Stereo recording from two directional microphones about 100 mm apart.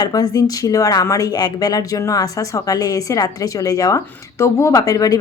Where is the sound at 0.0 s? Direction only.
40° left (ahead or behind).